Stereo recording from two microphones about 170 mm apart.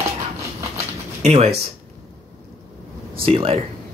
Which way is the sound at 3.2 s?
35° right (ahead or behind).